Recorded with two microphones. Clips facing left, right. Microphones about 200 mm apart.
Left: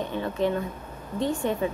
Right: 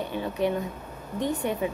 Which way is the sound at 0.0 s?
10° right (ahead or behind).